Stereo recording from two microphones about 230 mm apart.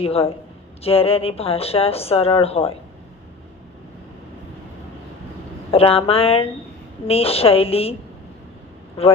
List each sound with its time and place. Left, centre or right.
0.0 s speech: left
5.7 s speech: left
9.0 s speech: left